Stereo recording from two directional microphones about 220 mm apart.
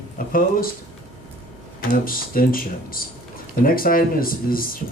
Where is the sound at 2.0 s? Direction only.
40° left (ahead or behind).